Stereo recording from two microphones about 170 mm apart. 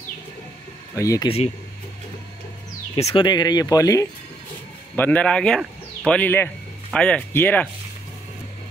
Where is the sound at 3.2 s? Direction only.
25° left (ahead or behind).